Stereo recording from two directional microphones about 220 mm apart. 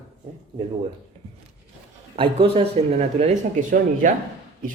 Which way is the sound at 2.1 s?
25° right (ahead or behind).